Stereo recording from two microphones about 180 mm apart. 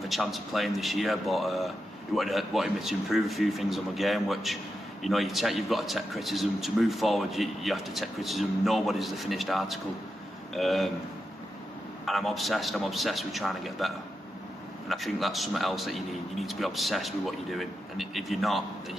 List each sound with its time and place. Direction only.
0.1 s a man's voice: centre (ahead or behind)
12.1 s a man's voice: centre (ahead or behind)